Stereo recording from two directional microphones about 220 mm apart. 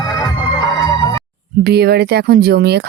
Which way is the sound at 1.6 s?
45° right (ahead or behind).